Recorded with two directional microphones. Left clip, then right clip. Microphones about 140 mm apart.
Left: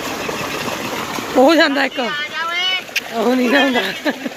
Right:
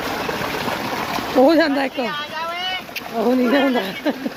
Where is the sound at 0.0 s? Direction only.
Centre (ahead or behind).